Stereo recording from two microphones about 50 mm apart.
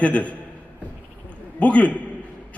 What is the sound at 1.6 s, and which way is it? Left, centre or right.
Speech, left.